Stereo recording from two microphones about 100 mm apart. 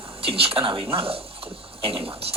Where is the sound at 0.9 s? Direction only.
70° right (ahead or behind).